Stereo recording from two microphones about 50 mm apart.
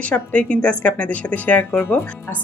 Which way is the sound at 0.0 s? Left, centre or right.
Left.